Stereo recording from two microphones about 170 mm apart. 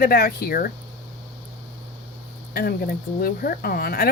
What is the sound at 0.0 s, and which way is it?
Speech, 65° left (ahead or behind).